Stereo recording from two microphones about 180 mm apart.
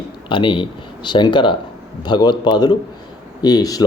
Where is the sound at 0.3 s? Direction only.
25° left (ahead or behind).